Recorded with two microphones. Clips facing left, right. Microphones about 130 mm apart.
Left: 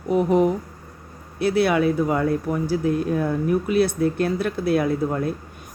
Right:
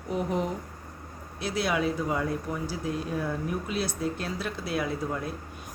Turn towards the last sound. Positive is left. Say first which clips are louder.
# left 8 dB
turn(degrees=50)  # may be behind; listen again after turning